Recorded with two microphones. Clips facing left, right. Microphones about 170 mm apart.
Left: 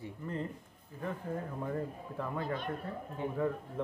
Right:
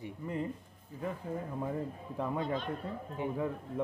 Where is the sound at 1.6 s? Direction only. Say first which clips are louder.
Right 1 dB; 10° right (ahead or behind).